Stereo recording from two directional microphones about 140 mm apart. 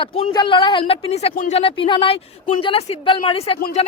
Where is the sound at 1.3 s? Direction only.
65° left (ahead or behind).